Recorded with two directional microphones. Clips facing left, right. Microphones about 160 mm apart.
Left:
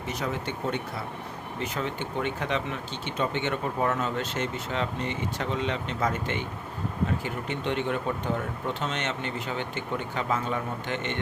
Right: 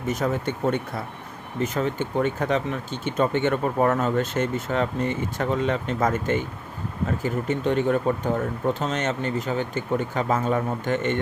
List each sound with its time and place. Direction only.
0.1 s speech: 50° right (ahead or behind)